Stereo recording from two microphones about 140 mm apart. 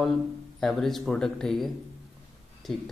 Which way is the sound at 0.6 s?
Centre (ahead or behind).